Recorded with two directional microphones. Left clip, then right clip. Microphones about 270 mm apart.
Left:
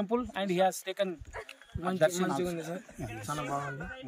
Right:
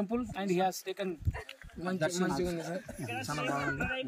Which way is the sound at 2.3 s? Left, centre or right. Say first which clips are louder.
Left 1 dB; centre.